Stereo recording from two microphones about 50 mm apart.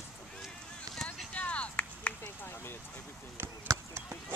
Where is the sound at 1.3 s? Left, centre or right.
Left.